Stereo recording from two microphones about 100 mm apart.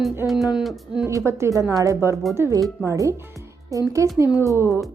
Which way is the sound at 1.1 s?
30° right (ahead or behind).